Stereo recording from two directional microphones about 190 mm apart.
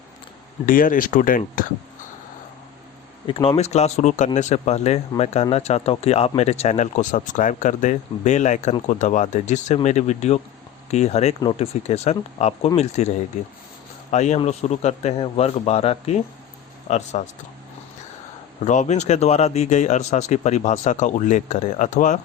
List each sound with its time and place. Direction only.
0.6 s speech: 45° left (ahead or behind)
3.2 s speech: 25° left (ahead or behind)
14.1 s speech: 35° left (ahead or behind)
18.6 s speech: 40° left (ahead or behind)